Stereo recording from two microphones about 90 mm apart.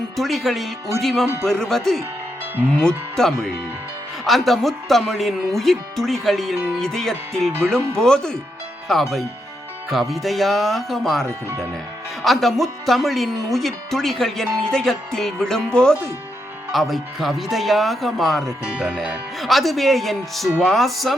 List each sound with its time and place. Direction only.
0.2 s speech: centre (ahead or behind)
11.3 s speech: 25° right (ahead or behind)
12.2 s speech: centre (ahead or behind)